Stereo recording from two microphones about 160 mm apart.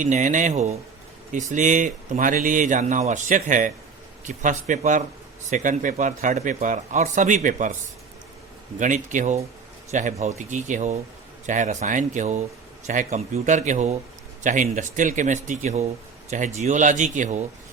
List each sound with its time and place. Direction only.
0.0 s a man's voice: 50° right (ahead or behind)
8.8 s a man's voice: 50° right (ahead or behind)